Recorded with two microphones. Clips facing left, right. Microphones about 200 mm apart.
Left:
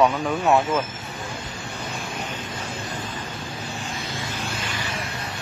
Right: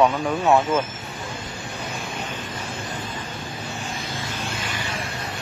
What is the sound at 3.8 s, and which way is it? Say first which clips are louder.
Waves: right 1 dB; 30° left (ahead or behind).